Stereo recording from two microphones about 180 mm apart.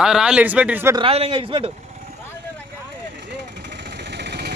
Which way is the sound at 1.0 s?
35° right (ahead or behind).